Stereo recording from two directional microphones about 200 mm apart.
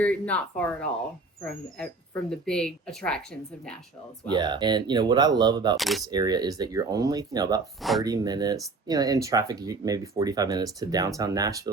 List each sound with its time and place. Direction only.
0.0 s speech: 5° left (ahead or behind)
2.3 s speech: 5° left (ahead or behind)
4.3 s speech: 20° right (ahead or behind)
5.7 s speech: centre (ahead or behind)
6.1 s speech: 20° right (ahead or behind)
7.8 s speech: centre (ahead or behind)
8.0 s speech: 20° right (ahead or behind)